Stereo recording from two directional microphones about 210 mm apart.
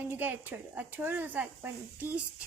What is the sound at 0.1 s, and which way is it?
Speech, 10° right (ahead or behind).